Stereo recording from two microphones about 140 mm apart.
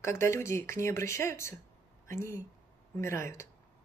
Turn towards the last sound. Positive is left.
turn(degrees=20)  # may be behind; listen again after turning